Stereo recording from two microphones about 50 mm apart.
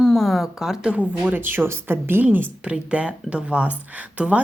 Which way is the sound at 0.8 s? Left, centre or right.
Right.